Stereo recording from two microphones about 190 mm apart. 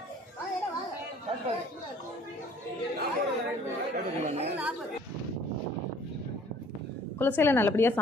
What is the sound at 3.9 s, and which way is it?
Chatter, 40° right (ahead or behind).